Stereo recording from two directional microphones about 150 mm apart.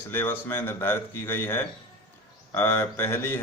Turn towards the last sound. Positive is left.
turn(degrees=15)  # may be behind; listen again after turning